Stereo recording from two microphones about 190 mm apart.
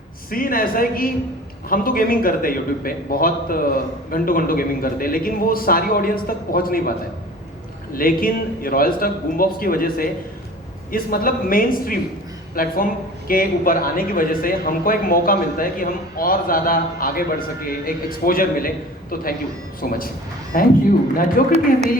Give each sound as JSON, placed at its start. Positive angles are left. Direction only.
{"t": 0.3, "sound": "a man's voice", "side_deg": 50}
{"t": 7.9, "sound": "a man's voice", "side_deg": 50}
{"t": 19.8, "sound": "a man's voice", "side_deg": 50}